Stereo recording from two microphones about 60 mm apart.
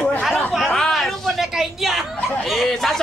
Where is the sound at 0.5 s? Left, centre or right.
Centre.